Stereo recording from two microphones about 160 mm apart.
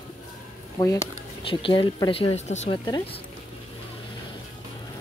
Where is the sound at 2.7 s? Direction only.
30° left (ahead or behind).